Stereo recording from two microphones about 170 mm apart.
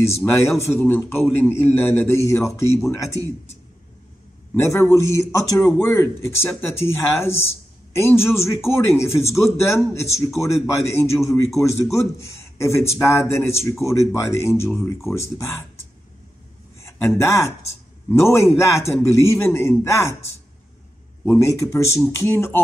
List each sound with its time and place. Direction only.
0.0 s speech: 15° left (ahead or behind)
4.6 s speech: 15° left (ahead or behind)
11.1 s speech: centre (ahead or behind)
11.8 s speech: 15° left (ahead or behind)
17.2 s speech: 15° left (ahead or behind)